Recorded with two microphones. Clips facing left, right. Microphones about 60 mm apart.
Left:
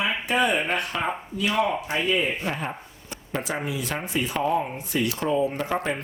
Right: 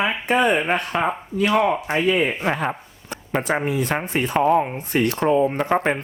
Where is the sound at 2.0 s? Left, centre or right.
Right.